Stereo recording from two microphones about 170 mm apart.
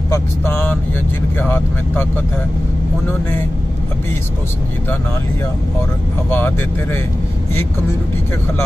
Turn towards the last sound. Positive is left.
turn(degrees=15)  # may be behind; listen again after turning